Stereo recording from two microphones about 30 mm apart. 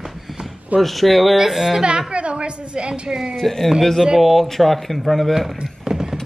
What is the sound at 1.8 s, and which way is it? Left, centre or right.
Speech, right.